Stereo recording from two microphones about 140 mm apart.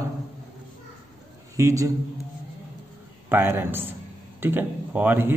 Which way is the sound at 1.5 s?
20° right (ahead or behind).